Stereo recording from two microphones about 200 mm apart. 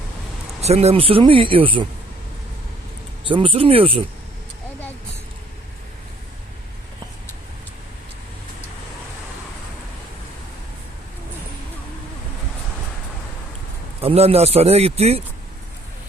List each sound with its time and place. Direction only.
0.6 s speech: 30° right (ahead or behind)
3.2 s speech: 25° right (ahead or behind)
14.0 s a man's voice: 30° right (ahead or behind)